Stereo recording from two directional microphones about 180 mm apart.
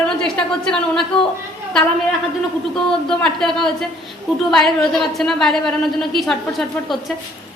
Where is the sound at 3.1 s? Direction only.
5° left (ahead or behind).